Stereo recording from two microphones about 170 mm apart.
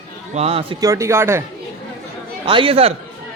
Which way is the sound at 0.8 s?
15° right (ahead or behind).